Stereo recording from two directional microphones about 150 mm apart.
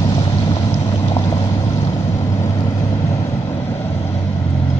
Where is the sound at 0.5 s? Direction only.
25° left (ahead or behind).